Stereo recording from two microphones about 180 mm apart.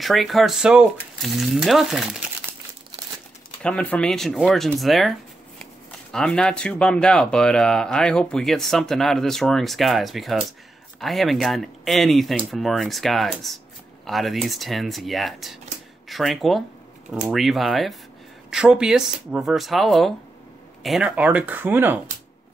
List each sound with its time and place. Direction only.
0.0 s speech: centre (ahead or behind)
3.6 s speech: 5° left (ahead or behind); by 22.0 s 10° right (ahead or behind)